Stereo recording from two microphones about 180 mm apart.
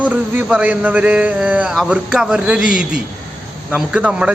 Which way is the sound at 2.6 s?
50° left (ahead or behind).